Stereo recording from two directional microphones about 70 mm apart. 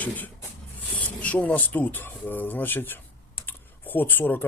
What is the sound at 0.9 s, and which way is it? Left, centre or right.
Speech, left.